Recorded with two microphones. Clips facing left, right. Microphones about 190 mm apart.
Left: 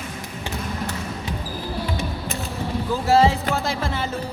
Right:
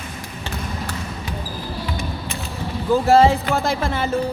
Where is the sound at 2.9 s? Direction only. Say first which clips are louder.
Right 4 dB; 55° right (ahead or behind).